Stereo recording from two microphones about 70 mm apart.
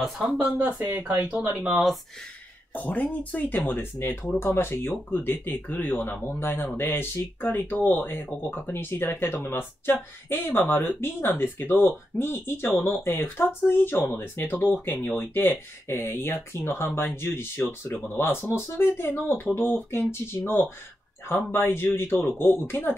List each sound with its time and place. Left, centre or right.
0.0 s speech: centre
0.8 s speech: right
2.7 s speech: left